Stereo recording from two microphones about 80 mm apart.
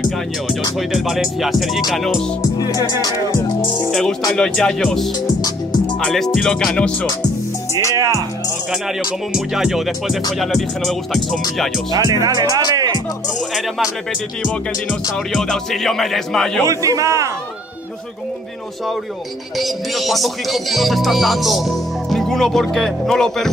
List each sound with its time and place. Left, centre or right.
0.5 s music: centre
2.6 s speech: left
4.4 s music: centre
6.0 s music: centre
9.3 s music: centre
11.9 s speech: right
15.3 s music: centre
16.6 s a man's voice: right
19.6 s music: centre